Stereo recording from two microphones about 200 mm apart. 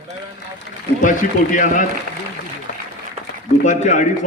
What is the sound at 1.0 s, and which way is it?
Speech, 40° left (ahead or behind).